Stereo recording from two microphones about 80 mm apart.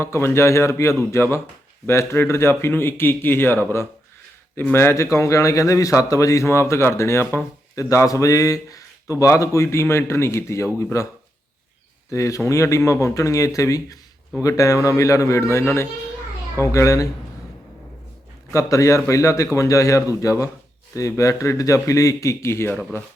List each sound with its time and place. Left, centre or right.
0.0 s speech: left
12.1 s speech: left
18.5 s speech: left